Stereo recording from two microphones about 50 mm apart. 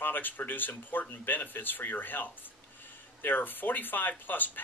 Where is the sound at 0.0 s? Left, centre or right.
Left.